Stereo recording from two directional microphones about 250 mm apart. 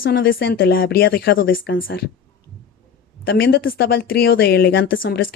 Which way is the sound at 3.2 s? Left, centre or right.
Left.